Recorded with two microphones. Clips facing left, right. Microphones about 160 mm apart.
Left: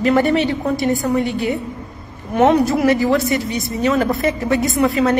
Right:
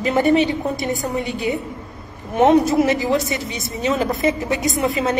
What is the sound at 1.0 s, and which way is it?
Speech, 20° right (ahead or behind).